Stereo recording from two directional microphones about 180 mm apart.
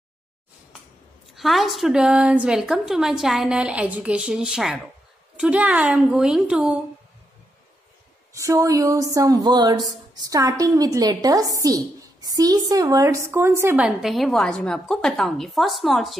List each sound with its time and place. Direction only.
1.3 s a woman's voice: centre (ahead or behind)
8.4 s speech: 20° right (ahead or behind); by 16.2 s centre (ahead or behind)